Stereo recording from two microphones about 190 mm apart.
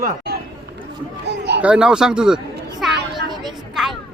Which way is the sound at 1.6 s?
5° right (ahead or behind).